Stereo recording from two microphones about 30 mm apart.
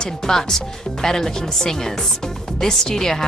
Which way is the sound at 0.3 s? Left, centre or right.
Centre.